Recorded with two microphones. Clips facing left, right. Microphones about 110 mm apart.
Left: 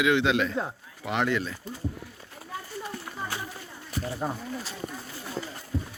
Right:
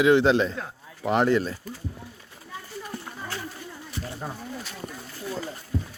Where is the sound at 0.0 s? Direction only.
35° right (ahead or behind).